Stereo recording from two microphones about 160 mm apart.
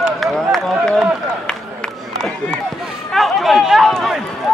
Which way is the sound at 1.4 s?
5° left (ahead or behind).